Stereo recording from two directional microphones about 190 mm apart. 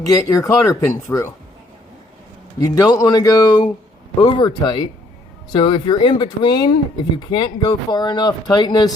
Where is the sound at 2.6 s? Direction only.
20° left (ahead or behind).